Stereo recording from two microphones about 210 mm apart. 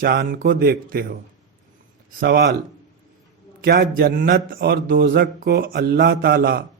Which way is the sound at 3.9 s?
40° right (ahead or behind).